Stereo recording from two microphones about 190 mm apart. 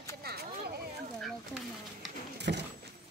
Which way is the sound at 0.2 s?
55° right (ahead or behind).